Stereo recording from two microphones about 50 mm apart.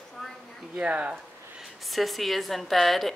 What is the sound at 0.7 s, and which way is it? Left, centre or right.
Speech, right.